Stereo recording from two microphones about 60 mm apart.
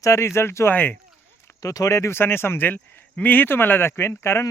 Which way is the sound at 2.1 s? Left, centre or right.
Left.